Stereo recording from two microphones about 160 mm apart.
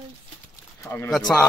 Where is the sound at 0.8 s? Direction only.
15° left (ahead or behind).